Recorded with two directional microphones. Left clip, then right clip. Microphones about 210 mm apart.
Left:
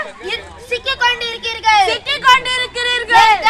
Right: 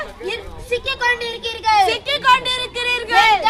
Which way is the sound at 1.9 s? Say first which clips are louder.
Left 3 dB; 20° right (ahead or behind).